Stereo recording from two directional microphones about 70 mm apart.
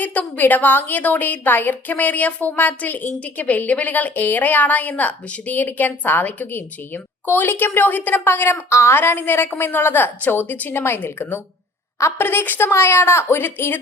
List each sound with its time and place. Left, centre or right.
0.0 s a woman's voice: left